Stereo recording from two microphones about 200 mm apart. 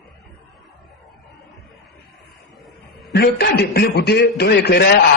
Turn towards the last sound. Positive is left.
turn(degrees=55)  # may be behind; listen again after turning